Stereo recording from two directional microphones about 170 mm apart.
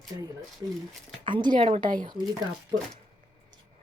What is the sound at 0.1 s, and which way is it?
Speech, 25° right (ahead or behind).